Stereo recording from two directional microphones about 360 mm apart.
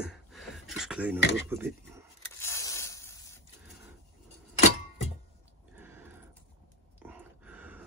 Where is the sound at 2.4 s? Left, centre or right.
Centre.